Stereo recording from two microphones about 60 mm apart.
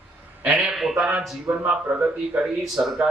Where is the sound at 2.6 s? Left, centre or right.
Centre.